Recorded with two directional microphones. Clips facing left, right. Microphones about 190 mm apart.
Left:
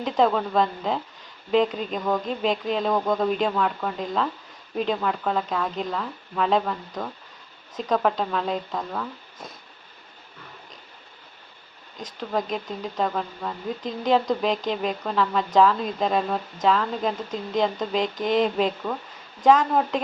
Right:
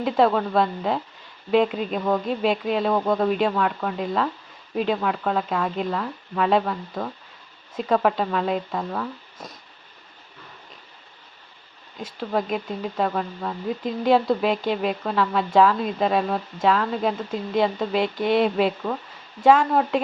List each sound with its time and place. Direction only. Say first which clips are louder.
0.0 s speech: right 2 dB; 5° right (ahead or behind)
11.9 s a woman's voice: right 2 dB; 5° right (ahead or behind)